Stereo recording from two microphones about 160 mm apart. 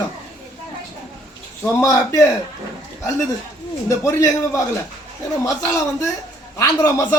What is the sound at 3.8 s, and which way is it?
A man's voice, 20° left (ahead or behind).